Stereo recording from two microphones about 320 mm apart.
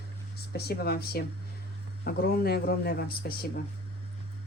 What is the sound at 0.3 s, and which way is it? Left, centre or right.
Speech, left.